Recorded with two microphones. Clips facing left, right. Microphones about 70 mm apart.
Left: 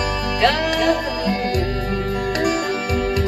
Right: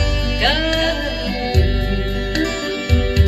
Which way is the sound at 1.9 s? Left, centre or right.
Left.